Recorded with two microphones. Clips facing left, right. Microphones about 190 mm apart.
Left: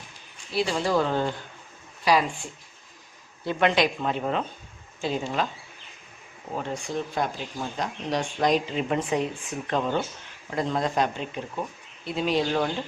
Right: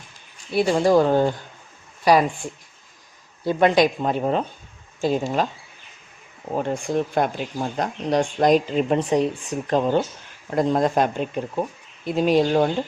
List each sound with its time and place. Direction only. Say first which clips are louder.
0.5 s speech: right 7 dB; 50° right (ahead or behind)
3.4 s speech: right 6 dB; 40° right (ahead or behind)
6.5 s speech: right 7 dB; 55° right (ahead or behind); by 10.0 s 35° right (ahead or behind)
10.5 s speech: right 6 dB; 45° right (ahead or behind)